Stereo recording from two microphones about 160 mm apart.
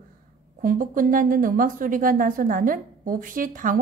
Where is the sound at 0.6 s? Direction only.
60° right (ahead or behind).